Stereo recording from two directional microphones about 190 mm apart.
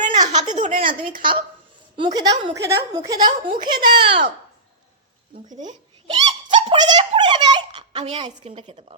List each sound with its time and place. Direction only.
0.1 s a sound: 35° right (ahead or behind)
1.2 s a woman's voice: 25° right (ahead or behind)
5.6 s giggle: 25° right (ahead or behind)